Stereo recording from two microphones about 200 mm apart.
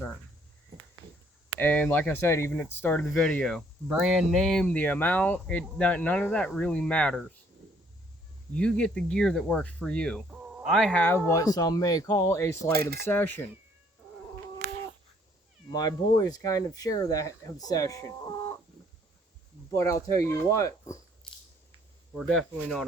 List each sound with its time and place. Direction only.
1.5 s speech: 10° left (ahead or behind)
8.5 s speech: 5° left (ahead or behind)
15.7 s speech: 20° left (ahead or behind)
19.7 s speech: 15° left (ahead or behind)
22.1 s speech: centre (ahead or behind)